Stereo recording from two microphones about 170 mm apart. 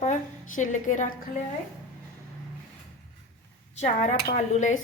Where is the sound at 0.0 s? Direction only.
45° left (ahead or behind).